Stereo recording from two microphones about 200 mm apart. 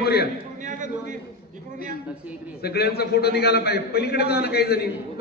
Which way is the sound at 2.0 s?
5° right (ahead or behind).